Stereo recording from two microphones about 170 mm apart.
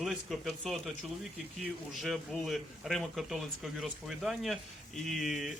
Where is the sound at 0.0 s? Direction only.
Centre (ahead or behind).